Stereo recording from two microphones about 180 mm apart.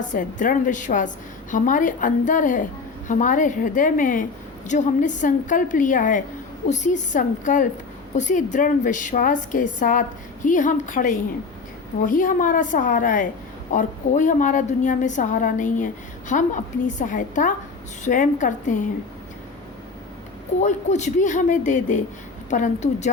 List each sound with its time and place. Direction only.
0.0 s a woman's voice: 45° left (ahead or behind)
20.6 s a woman's voice: 40° left (ahead or behind)